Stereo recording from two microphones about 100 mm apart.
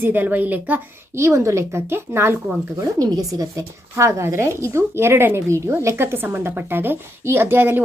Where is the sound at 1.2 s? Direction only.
30° right (ahead or behind).